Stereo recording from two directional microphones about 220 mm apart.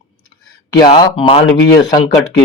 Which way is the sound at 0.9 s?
25° left (ahead or behind).